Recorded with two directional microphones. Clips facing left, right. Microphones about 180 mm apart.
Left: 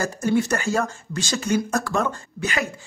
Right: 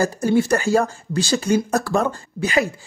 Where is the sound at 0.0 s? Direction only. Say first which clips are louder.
Right 4 dB; 30° right (ahead or behind).